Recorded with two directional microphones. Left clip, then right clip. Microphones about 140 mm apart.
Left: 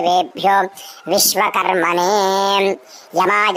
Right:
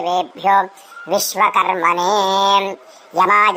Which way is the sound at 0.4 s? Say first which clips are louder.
Even; 30° left (ahead or behind).